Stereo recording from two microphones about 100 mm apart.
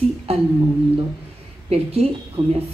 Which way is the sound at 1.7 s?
90° right.